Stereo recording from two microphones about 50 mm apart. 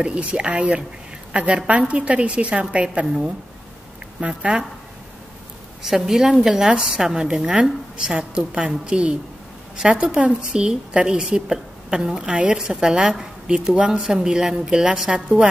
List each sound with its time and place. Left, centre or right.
0.0 s a woman's voice: right
5.8 s a woman's voice: centre
10.2 s a woman's voice: centre